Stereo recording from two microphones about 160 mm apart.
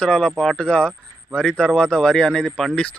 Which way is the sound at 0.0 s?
5° left (ahead or behind).